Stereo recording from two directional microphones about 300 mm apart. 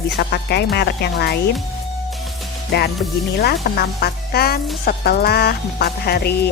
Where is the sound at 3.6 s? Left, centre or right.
Left.